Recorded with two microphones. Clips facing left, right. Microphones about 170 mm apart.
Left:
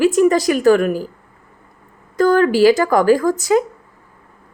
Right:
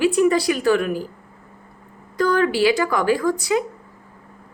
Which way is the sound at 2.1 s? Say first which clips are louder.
Left 5 dB; 45° left (ahead or behind).